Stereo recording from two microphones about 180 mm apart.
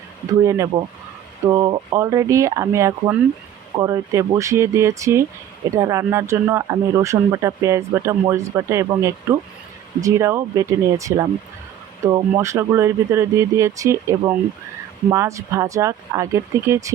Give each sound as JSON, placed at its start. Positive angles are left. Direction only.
{"t": 0.4, "sound": "speech", "side_deg": -15}